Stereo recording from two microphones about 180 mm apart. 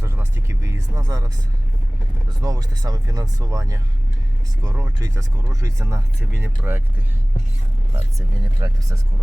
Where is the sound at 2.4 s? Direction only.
20° right (ahead or behind).